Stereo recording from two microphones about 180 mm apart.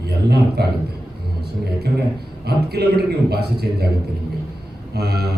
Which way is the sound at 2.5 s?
60° right (ahead or behind).